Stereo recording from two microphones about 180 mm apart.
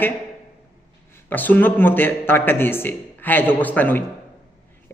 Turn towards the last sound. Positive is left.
turn(degrees=10)  # may be behind; listen again after turning